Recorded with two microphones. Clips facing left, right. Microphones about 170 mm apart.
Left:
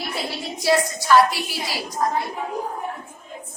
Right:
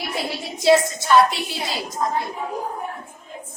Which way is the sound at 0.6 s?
25° right (ahead or behind).